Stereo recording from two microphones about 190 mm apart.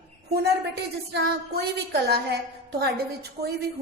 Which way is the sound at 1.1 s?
65° right (ahead or behind).